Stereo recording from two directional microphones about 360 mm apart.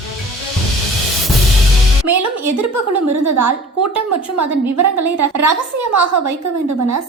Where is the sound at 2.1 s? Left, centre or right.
Right.